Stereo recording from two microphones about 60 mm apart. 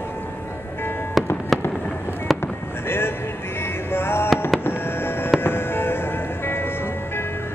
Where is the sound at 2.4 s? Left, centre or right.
Left.